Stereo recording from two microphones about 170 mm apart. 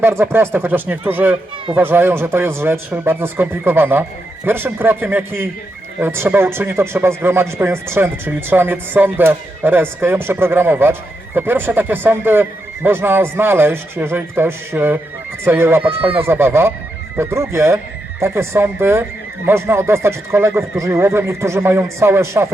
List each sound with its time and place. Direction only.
0.0 s speech: 15° right (ahead or behind)